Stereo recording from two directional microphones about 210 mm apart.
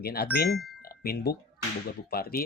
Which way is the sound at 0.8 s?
45° left (ahead or behind).